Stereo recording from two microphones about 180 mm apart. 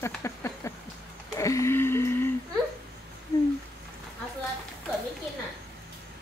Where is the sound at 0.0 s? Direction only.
15° left (ahead or behind).